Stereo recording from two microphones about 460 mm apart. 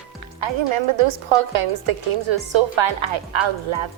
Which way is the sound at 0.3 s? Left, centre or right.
Right.